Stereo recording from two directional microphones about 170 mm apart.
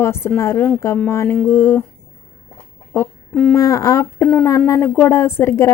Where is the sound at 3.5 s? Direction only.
20° left (ahead or behind).